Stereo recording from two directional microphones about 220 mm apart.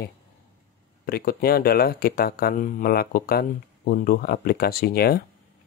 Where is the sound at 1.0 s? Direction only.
45° left (ahead or behind).